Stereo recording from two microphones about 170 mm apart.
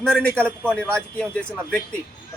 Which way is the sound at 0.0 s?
5° left (ahead or behind).